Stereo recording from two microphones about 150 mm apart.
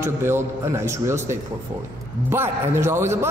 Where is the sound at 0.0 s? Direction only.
15° right (ahead or behind).